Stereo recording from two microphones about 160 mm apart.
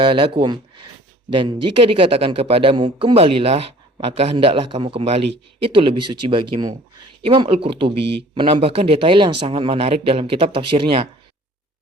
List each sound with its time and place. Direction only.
0.0 s a man's voice: 30° right (ahead or behind)
7.9 s speech: 90° right
8.4 s a man's voice: 35° right (ahead or behind)